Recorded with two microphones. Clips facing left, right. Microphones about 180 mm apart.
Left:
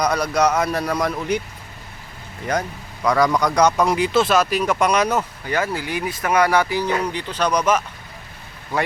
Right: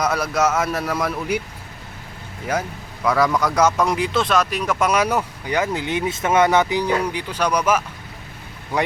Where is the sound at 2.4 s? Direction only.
5° right (ahead or behind).